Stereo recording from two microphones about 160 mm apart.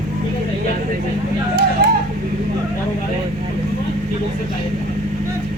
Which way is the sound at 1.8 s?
80° right.